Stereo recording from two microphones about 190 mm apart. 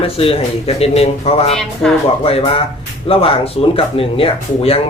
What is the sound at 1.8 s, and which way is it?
Speech, 5° left (ahead or behind).